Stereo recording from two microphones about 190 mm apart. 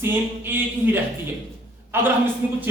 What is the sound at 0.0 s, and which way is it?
Speech, 10° right (ahead or behind).